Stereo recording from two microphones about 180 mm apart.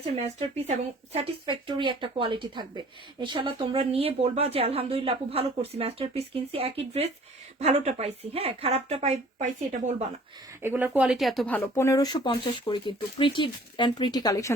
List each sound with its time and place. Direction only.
0.0 s speech: 35° right (ahead or behind)
10.6 s speech: 10° right (ahead or behind); by 14.5 s 20° left (ahead or behind)